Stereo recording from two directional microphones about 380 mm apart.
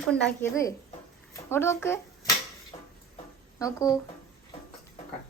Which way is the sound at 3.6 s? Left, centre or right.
Centre.